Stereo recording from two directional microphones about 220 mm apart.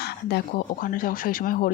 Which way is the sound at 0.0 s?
45° left (ahead or behind).